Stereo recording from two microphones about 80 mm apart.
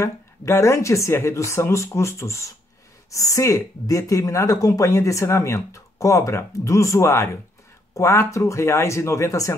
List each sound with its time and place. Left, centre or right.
0.0 s speech: left